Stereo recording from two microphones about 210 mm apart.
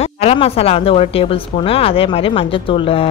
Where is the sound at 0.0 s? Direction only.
30° left (ahead or behind).